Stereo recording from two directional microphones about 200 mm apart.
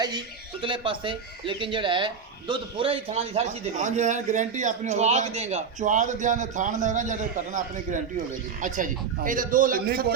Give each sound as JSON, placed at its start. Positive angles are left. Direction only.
{"t": 0.6, "sound": "a man's voice", "side_deg": -25}